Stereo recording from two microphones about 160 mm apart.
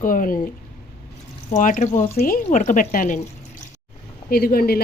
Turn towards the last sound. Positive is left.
turn(degrees=70)  # may be behind; listen again after turning